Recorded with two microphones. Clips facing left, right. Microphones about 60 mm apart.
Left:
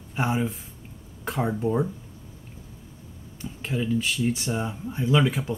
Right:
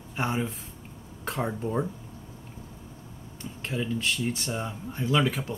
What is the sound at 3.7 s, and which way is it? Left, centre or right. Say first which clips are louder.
Speech: left 3 dB; centre.